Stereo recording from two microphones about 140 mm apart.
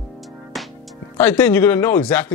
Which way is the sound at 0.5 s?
Centre (ahead or behind).